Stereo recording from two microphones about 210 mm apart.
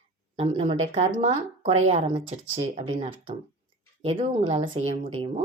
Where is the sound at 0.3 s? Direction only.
25° right (ahead or behind).